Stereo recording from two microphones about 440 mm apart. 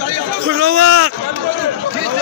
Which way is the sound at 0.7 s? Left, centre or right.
Right.